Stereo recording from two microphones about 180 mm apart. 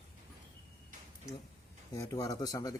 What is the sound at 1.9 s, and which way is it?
Speech, 20° left (ahead or behind).